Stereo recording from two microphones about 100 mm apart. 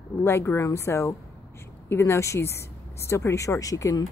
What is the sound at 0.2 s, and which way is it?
Speech, 25° left (ahead or behind).